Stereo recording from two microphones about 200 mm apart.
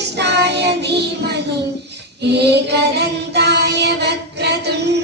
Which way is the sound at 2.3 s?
55° right (ahead or behind).